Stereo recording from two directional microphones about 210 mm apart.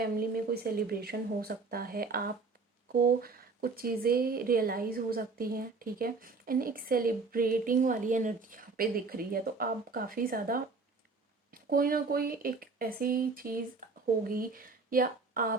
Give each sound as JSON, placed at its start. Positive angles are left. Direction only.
{"t": 0.0, "sound": "a woman's voice", "side_deg": -45}